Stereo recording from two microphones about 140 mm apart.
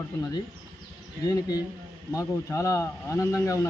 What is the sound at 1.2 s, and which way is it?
Speech, 25° left (ahead or behind).